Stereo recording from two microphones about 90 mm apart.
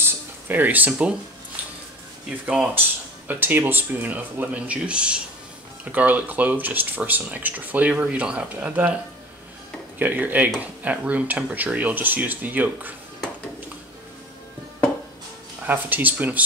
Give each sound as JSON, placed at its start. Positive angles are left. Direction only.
{"t": 0.0, "sound": "a sound", "side_deg": -20}
{"t": 2.2, "sound": "speech", "side_deg": -10}
{"t": 15.6, "sound": "speech", "side_deg": -20}